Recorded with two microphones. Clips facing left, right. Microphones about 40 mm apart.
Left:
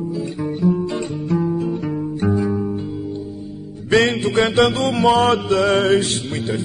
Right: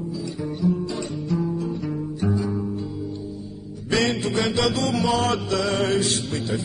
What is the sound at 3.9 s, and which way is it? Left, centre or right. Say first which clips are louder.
Mantra: left 6 dB; left.